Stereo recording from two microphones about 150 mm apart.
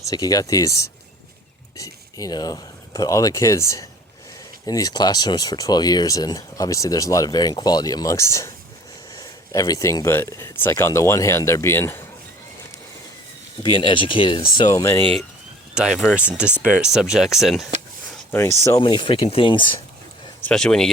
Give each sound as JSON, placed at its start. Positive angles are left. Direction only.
{"t": 0.1, "sound": "speech", "side_deg": 25}
{"t": 13.6, "sound": "speech", "side_deg": 30}
{"t": 15.7, "sound": "speech", "side_deg": -5}
{"t": 18.8, "sound": "speech", "side_deg": 35}
{"t": 20.4, "sound": "speech", "side_deg": 5}